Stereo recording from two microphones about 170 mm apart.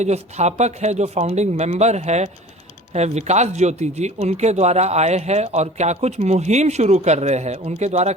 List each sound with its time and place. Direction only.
0.0 s speech: 40° right (ahead or behind)